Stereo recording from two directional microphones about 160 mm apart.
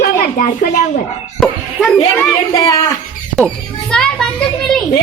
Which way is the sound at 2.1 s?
20° left (ahead or behind).